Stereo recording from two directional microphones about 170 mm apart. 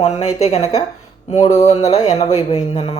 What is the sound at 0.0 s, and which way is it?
Speech, 40° left (ahead or behind).